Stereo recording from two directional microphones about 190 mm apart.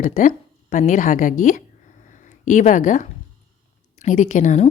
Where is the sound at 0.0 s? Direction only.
45° left (ahead or behind).